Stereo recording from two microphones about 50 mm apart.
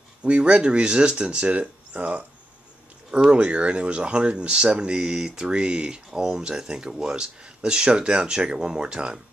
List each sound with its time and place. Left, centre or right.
0.2 s speech: right
3.1 s speech: centre